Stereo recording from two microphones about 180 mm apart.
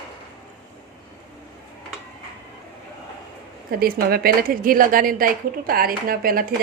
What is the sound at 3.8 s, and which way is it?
A woman's voice, 55° right (ahead or behind).